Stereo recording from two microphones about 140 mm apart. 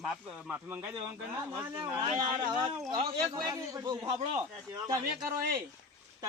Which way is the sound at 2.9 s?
35° right (ahead or behind).